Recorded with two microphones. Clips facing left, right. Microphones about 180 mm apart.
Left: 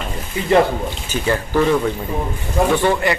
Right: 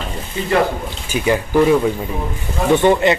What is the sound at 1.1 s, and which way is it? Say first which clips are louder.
A man's voice: right 3 dB; 15° right (ahead or behind).